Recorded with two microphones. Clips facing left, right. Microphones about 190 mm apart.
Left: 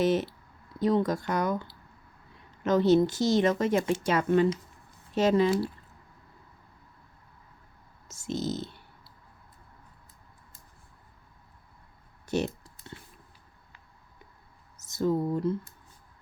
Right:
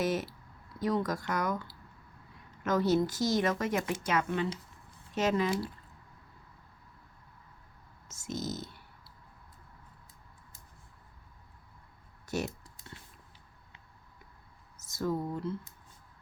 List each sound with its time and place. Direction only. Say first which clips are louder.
0.0 s a woman's voice: left 6 dB; 25° left (ahead or behind)
2.6 s a woman's voice: left 6 dB; 25° left (ahead or behind)
8.1 s a woman's voice: left 5 dB; 30° left (ahead or behind)
12.2 s computer keyboard: left 5 dB; 25° left (ahead or behind)
14.8 s a sound: left 6 dB; 25° left (ahead or behind)